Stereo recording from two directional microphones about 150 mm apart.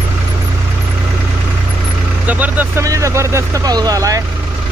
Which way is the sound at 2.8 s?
20° right (ahead or behind).